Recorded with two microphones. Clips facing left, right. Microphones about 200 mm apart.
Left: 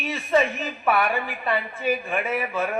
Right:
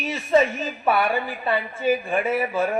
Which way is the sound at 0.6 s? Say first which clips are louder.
Right 1 dB; 30° right (ahead or behind).